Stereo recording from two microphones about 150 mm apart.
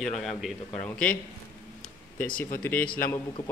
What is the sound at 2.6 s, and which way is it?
Speech, 10° left (ahead or behind).